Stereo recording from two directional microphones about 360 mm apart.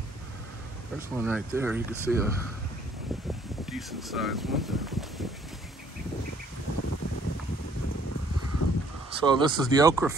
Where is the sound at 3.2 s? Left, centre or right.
Centre.